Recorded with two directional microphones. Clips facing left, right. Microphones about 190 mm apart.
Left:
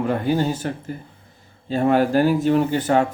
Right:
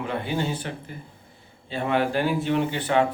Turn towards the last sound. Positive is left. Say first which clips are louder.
# left 4 dB
turn(degrees=45)  # may be behind; listen again after turning